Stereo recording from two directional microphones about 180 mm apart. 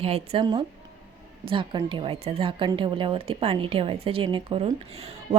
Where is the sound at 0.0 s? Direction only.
35° right (ahead or behind).